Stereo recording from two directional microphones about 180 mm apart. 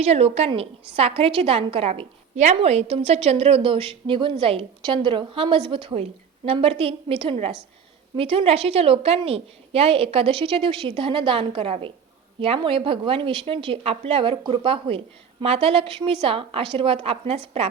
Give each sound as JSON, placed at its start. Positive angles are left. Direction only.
{"t": 0.0, "sound": "a woman's voice", "side_deg": -35}